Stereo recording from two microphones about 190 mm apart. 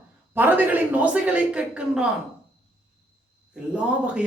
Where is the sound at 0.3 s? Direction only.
10° right (ahead or behind).